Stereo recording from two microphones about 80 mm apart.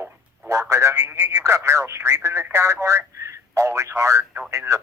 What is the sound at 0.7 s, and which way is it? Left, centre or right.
Speech, right.